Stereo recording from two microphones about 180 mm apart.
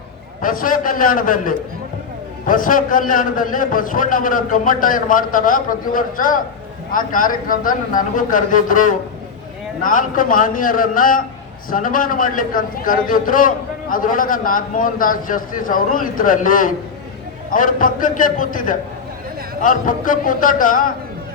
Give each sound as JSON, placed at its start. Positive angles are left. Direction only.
{"t": 0.4, "sound": "a man's voice", "side_deg": 50}